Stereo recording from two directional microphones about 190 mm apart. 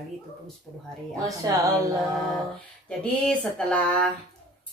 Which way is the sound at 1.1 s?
20° right (ahead or behind).